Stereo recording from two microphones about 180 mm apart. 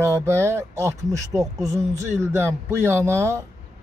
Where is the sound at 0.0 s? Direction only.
15° right (ahead or behind).